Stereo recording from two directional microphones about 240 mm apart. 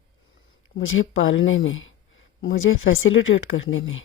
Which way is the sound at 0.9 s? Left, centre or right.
Left.